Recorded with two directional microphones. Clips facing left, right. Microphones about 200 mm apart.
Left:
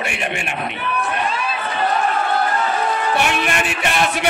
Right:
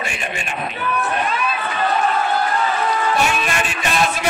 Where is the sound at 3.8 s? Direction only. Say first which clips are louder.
Even; 65° left (ahead or behind).